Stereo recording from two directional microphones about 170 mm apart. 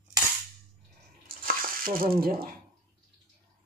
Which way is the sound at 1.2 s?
55° right (ahead or behind).